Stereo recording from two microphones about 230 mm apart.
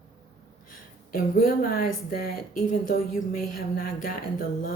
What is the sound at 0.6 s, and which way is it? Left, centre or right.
A woman's voice, left.